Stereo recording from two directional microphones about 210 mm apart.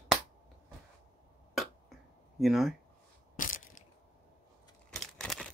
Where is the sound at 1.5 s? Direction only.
Centre (ahead or behind).